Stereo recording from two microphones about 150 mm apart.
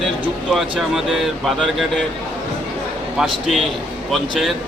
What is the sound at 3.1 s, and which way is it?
Speech, centre (ahead or behind).